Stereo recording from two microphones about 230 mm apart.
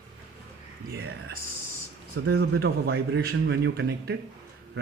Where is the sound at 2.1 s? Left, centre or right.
Right.